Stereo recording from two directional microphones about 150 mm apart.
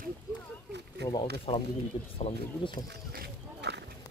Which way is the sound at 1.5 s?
35° left (ahead or behind).